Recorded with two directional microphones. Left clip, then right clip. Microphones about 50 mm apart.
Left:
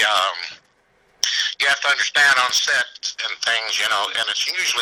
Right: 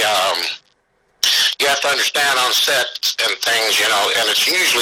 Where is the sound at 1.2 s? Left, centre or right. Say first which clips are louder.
Right 5 dB; right.